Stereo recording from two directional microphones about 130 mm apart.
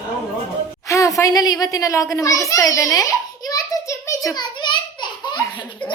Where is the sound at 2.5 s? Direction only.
25° left (ahead or behind).